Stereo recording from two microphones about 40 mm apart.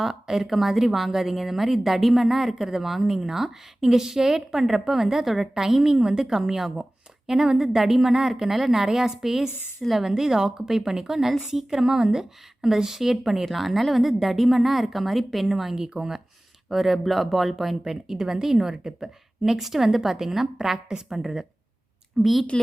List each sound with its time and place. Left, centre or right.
0.0 s a woman's voice: centre